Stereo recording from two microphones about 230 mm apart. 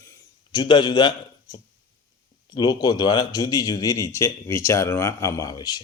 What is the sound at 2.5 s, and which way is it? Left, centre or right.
Speech, centre.